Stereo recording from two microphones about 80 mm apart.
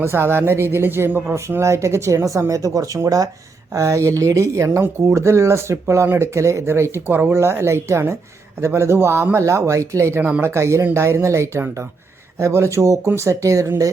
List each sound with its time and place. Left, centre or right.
0.0 s speech: right